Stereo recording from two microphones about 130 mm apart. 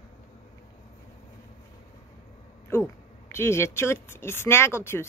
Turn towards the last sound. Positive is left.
turn(degrees=20)  # may be behind; listen again after turning